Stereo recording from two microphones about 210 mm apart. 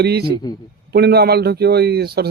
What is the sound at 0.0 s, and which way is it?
Speech, 50° right (ahead or behind).